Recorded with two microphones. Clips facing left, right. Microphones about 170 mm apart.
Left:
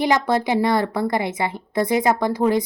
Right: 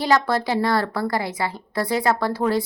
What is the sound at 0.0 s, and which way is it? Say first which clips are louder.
A woman's voice: left 1 dB; 20° left (ahead or behind).